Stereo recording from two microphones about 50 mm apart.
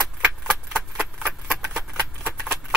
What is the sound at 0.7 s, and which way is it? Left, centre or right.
Keys jangling, right.